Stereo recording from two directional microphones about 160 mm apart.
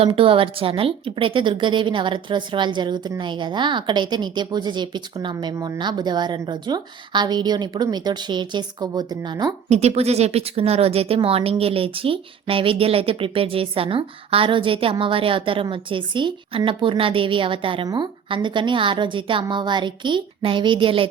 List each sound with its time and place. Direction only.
0.0 s a woman's voice: 35° right (ahead or behind)
9.6 s speech: 40° right (ahead or behind)